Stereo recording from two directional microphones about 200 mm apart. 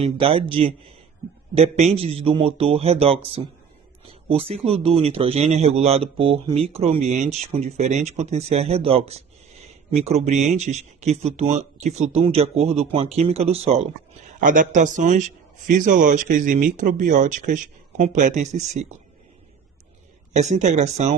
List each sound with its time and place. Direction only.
0.0 s speech: 25° right (ahead or behind)
14.4 s speech: 40° right (ahead or behind)
20.3 s speech: 35° right (ahead or behind)